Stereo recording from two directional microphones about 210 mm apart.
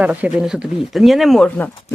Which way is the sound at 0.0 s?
5° right (ahead or behind).